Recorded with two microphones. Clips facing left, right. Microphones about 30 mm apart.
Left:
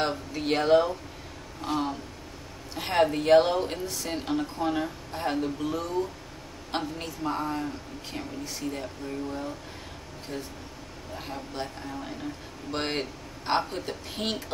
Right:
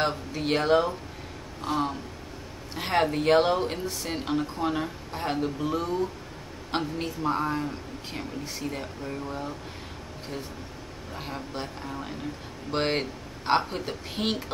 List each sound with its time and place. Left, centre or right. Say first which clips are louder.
0.0 s speech: right 1 dB; centre
11.1 s speech: even; centre